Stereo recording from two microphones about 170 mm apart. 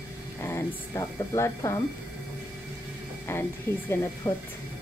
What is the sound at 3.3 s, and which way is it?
Speech, 15° left (ahead or behind).